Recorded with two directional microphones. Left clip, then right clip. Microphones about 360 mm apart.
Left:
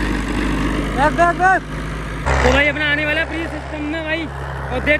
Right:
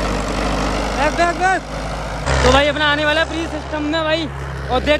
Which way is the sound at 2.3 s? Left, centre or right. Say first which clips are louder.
Right 1 dB; centre.